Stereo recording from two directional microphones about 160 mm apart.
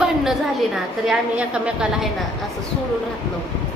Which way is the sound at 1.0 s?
5° right (ahead or behind).